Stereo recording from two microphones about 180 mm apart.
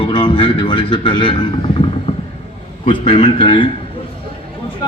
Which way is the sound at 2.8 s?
30° left (ahead or behind).